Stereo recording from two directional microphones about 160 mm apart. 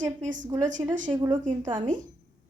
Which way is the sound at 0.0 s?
55° right (ahead or behind).